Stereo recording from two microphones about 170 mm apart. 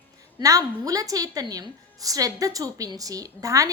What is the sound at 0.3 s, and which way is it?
A woman's voice, 20° right (ahead or behind).